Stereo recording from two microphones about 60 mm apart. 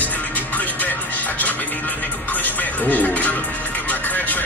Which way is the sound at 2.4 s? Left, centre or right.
Left.